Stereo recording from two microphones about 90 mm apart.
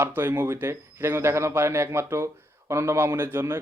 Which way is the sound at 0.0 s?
25° right (ahead or behind).